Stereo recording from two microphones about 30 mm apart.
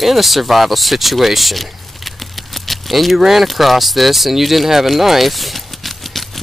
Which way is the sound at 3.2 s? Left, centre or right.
Centre.